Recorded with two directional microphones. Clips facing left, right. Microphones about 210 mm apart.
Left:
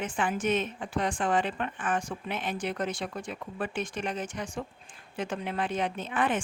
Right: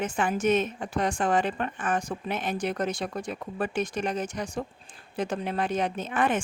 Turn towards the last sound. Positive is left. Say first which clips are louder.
# right 3 dB
turn(degrees=-45)  # may be behind; listen again after turning